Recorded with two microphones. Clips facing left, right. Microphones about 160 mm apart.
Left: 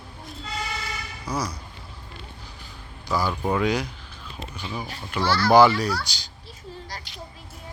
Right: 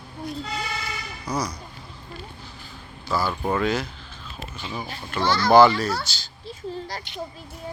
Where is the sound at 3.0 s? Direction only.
15° left (ahead or behind).